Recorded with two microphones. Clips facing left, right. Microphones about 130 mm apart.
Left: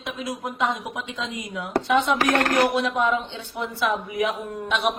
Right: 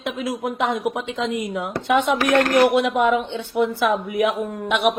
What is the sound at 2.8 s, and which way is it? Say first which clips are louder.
A woman's voice: right 4 dB; 60° right (ahead or behind).